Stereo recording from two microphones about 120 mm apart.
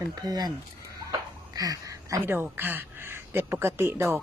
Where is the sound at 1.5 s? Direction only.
30° right (ahead or behind).